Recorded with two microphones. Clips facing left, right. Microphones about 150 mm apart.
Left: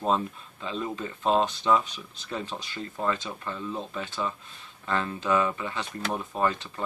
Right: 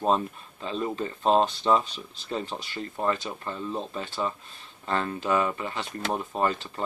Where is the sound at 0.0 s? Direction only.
20° right (ahead or behind).